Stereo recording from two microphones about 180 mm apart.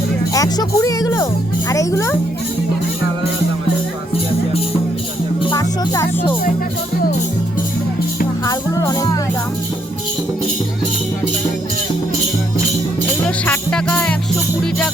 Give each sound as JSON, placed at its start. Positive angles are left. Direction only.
{"t": 0.3, "sound": "a child's voice", "side_deg": 20}
{"t": 5.5, "sound": "music", "side_deg": 20}
{"t": 8.4, "sound": "music", "side_deg": 20}
{"t": 13.2, "sound": "music", "side_deg": 5}